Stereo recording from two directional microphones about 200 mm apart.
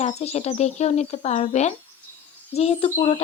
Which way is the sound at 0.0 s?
30° left (ahead or behind).